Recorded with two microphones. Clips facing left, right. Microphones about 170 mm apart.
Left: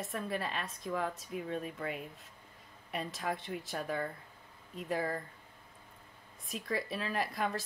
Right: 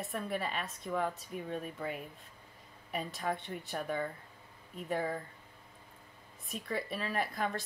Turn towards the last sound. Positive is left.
turn(degrees=0)  # may be behind; listen again after turning